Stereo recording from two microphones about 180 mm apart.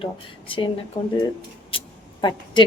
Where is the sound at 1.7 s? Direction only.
25° left (ahead or behind).